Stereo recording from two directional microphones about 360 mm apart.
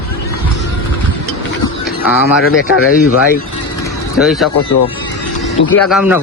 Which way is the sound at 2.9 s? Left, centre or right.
Left.